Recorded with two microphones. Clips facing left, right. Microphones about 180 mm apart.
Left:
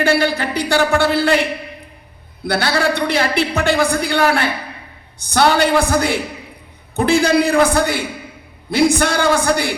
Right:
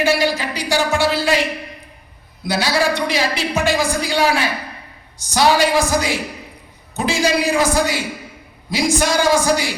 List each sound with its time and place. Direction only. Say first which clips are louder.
0.0 s a man's voice: left 1 dB; 60° left (ahead or behind)
2.5 s a man's voice: left 1 dB; 60° left (ahead or behind)